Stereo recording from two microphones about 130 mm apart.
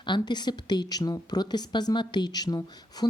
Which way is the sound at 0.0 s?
35° left (ahead or behind).